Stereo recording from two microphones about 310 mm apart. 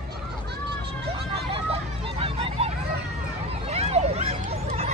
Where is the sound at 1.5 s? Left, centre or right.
Centre.